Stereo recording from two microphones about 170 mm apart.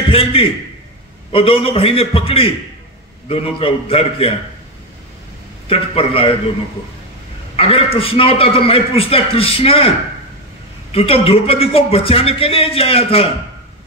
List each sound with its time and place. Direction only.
0.1 s speech: 35° left (ahead or behind)
5.7 s speech: 35° left (ahead or behind)
7.5 s speech: 35° left (ahead or behind)